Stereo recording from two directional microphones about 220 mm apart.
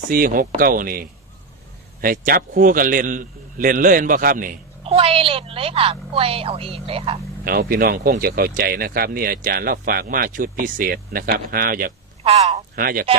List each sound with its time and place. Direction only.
0.1 s speech: 40° right (ahead or behind)
4.8 s a woman's voice: 25° right (ahead or behind)
7.4 s speech: 40° right (ahead or behind)
12.2 s a woman's voice: 30° right (ahead or behind)